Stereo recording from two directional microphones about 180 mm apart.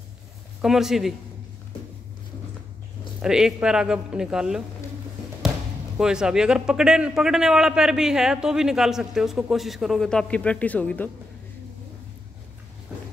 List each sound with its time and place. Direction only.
0.6 s a man's voice: centre (ahead or behind)
3.2 s a man's voice: 5° right (ahead or behind)
5.9 s a man's voice: 5° right (ahead or behind)